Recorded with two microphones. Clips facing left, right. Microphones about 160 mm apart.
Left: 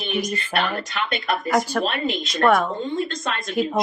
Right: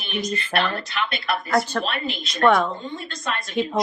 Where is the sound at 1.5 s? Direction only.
10° left (ahead or behind).